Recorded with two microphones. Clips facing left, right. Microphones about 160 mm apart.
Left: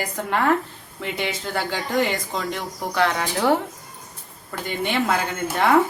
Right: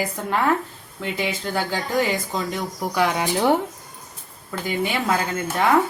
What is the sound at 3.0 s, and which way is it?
Speech, 15° right (ahead or behind).